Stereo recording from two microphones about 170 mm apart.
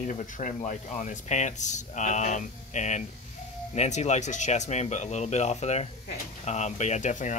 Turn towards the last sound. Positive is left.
turn(degrees=45)  # may be behind; listen again after turning